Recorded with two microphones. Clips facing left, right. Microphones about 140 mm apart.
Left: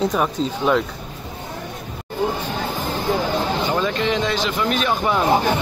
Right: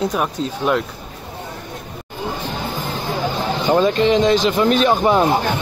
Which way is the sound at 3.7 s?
30° right (ahead or behind).